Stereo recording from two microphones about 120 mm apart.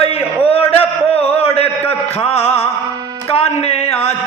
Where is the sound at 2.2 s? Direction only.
55° left (ahead or behind).